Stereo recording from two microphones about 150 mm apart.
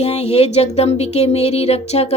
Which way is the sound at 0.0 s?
45° left (ahead or behind).